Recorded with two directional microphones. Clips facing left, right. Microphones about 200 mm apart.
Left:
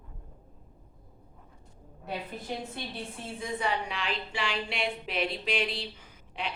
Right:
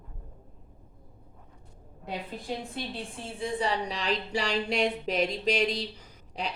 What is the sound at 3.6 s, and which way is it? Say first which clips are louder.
Speech: right 1 dB; 35° right (ahead or behind).